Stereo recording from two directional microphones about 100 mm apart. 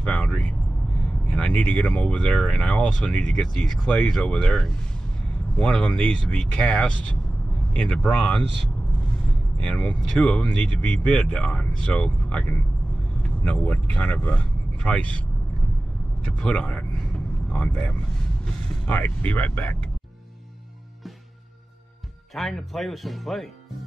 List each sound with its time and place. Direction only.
0.0 s speech: 10° left (ahead or behind)
16.3 s speech: 10° left (ahead or behind)
22.3 s speech: centre (ahead or behind)